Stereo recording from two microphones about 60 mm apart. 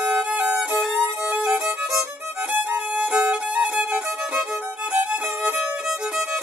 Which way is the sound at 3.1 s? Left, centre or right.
Centre.